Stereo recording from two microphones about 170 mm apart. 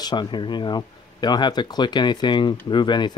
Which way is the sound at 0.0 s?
25° left (ahead or behind).